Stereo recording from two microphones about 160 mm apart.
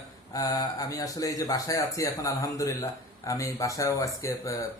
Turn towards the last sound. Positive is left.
turn(degrees=20)  # may be behind; listen again after turning